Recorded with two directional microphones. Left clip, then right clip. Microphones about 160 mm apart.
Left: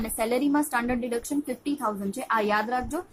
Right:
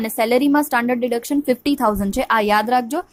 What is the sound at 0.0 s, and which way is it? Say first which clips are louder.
A woman's voice: right 9 dB; 45° right (ahead or behind).